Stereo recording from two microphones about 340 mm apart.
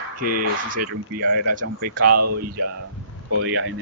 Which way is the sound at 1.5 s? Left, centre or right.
Right.